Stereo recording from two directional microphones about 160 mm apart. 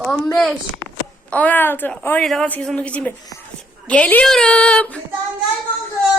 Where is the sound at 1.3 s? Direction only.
10° left (ahead or behind).